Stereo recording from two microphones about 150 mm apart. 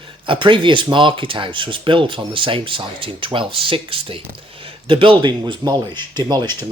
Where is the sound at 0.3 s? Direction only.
35° right (ahead or behind).